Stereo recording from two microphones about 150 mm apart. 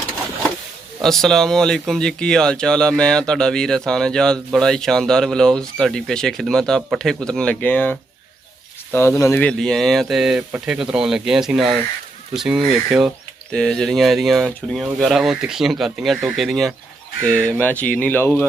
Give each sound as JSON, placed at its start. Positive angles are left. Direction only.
{"t": 1.0, "sound": "speech", "side_deg": 0}
{"t": 9.4, "sound": "speech", "side_deg": 5}